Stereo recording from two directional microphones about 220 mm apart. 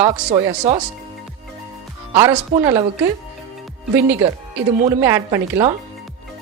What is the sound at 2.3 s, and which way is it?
Speech, 20° right (ahead or behind).